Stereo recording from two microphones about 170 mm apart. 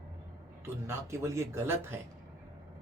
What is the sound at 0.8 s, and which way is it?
Speech, 15° right (ahead or behind).